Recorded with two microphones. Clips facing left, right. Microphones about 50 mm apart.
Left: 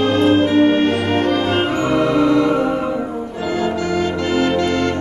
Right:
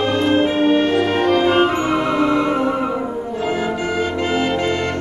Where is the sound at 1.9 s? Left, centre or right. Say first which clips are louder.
Left 2 dB; right.